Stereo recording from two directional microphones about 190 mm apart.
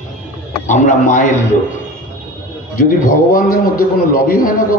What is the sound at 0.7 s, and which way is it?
Speech, 40° left (ahead or behind).